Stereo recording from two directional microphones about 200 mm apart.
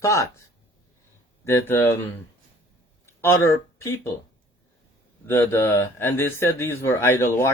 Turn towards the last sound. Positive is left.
turn(degrees=10)  # may be behind; listen again after turning